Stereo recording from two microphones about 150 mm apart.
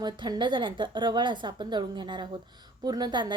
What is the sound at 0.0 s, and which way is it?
A woman's voice, 30° right (ahead or behind).